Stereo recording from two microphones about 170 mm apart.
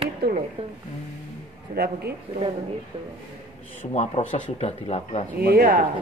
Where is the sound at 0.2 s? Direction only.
70° right (ahead or behind).